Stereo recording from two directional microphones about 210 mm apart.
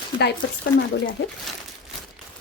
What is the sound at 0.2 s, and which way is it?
Speech, 50° left (ahead or behind).